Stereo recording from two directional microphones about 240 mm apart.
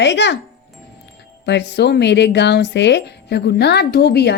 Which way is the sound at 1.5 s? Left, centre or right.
Left.